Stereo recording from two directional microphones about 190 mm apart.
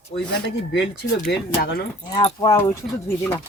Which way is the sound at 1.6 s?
60° left (ahead or behind).